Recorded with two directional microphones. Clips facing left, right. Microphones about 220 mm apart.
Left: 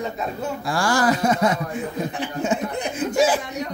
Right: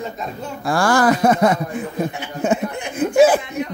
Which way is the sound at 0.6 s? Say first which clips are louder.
Right 5 dB; 55° right (ahead or behind).